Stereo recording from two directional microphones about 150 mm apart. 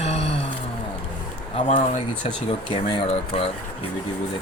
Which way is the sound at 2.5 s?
35° left (ahead or behind).